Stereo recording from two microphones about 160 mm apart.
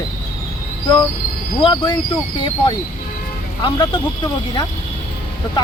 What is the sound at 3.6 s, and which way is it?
Speech, 30° left (ahead or behind).